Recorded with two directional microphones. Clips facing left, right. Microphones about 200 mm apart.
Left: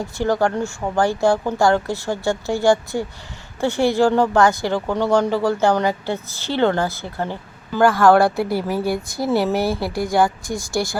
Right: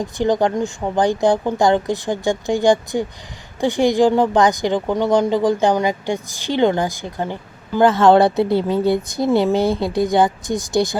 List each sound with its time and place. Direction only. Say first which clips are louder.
0.0 s speech: right 2 dB; 20° right (ahead or behind)